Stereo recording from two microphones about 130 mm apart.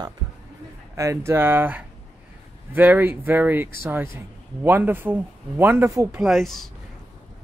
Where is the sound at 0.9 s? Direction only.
20° right (ahead or behind).